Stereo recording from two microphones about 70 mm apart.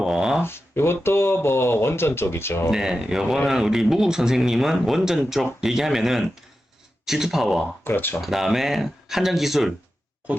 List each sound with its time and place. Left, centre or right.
0.0 s a sound: centre
0.4 s speech: left
2.6 s speech: centre
7.9 s speech: left
8.2 s speech: centre
10.3 s grunt: right